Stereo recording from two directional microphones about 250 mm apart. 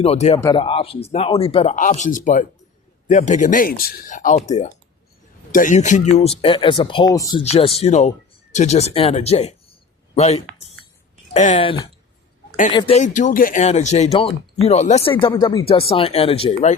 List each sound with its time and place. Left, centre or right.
0.0 s speech: left
0.3 s speech: centre